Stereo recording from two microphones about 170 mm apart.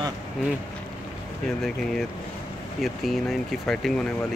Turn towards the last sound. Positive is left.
turn(degrees=0)  # may be behind; listen again after turning